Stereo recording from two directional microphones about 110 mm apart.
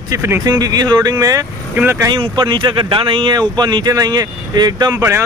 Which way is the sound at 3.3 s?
40° right (ahead or behind).